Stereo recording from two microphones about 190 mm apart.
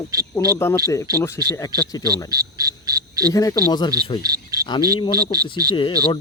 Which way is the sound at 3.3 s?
20° left (ahead or behind).